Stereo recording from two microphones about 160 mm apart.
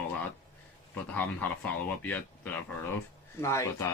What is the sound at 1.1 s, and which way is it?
Speech, 10° left (ahead or behind).